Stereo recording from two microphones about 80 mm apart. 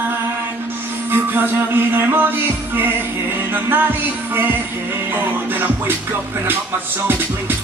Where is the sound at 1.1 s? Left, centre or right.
Right.